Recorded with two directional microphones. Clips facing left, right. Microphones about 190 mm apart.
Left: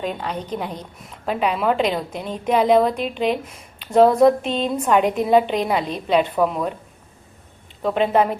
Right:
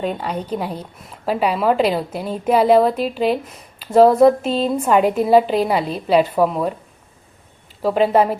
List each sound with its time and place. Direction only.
0.2 s a woman's voice: 10° right (ahead or behind)
7.8 s a woman's voice: 5° right (ahead or behind)